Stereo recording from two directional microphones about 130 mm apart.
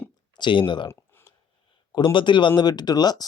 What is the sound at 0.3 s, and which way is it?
Speech, 40° left (ahead or behind).